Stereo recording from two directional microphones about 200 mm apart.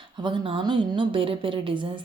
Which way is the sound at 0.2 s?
25° right (ahead or behind).